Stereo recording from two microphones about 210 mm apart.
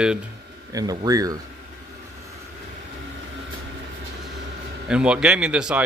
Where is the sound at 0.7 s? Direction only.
20° right (ahead or behind).